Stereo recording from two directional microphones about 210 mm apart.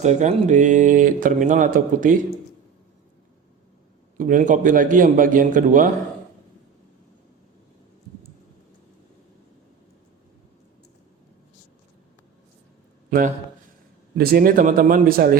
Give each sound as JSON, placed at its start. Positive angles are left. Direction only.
{"t": 0.0, "sound": "speech", "side_deg": -35}
{"t": 4.2, "sound": "speech", "side_deg": -40}
{"t": 13.1, "sound": "a man's voice", "side_deg": -40}